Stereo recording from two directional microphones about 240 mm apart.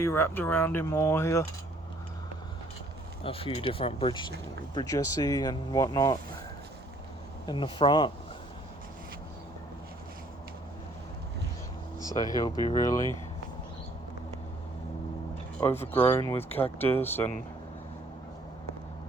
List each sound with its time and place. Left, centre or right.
0.0 s speech: centre
3.2 s speech: left
7.4 s speech: centre
12.0 s speech: centre
15.6 s speech: centre